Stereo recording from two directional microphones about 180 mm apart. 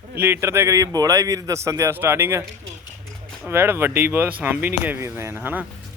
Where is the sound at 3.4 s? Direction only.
10° right (ahead or behind).